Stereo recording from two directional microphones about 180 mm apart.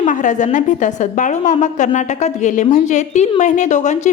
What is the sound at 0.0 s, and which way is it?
A woman's voice, 45° left (ahead or behind).